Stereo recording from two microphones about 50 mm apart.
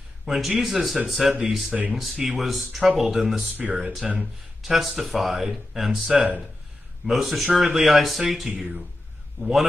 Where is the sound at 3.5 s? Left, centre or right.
Right.